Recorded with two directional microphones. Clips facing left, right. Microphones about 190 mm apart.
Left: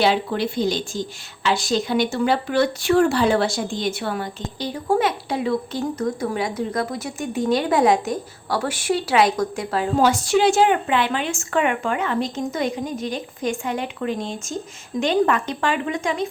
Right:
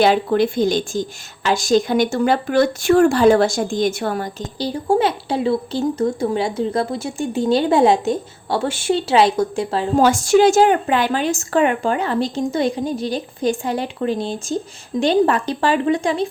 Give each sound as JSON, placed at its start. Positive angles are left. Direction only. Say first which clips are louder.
{"t": 0.0, "sound": "a woman's voice", "louder": "right 5 dB", "side_deg": -50}
{"t": 10.0, "sound": "a woman's voice", "louder": "right 5 dB", "side_deg": -45}